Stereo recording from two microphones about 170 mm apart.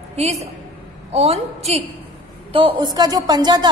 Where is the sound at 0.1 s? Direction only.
40° right (ahead or behind).